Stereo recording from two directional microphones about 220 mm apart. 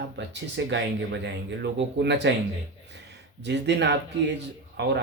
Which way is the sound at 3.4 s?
50° right (ahead or behind).